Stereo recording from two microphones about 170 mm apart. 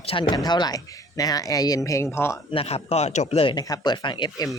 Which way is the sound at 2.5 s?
35° left (ahead or behind).